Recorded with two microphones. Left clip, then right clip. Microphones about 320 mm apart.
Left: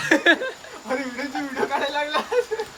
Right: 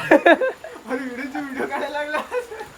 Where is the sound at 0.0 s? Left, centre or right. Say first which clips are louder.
Right 4 dB; centre.